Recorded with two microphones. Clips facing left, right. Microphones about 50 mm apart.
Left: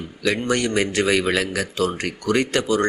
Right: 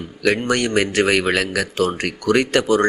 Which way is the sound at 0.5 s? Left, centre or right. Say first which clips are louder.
Right 3 dB; right.